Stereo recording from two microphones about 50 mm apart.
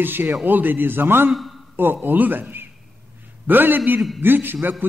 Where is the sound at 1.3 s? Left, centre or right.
Centre.